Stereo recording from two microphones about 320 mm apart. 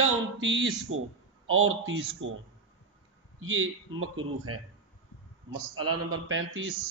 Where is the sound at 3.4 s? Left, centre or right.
Right.